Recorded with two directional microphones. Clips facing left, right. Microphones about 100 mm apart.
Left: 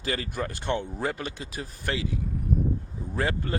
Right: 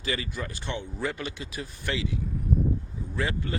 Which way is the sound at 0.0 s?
45° left (ahead or behind).